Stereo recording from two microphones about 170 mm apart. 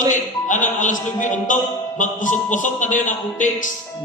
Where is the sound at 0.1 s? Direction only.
50° left (ahead or behind).